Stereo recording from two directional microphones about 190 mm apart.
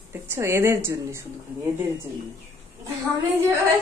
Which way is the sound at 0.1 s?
15° right (ahead or behind).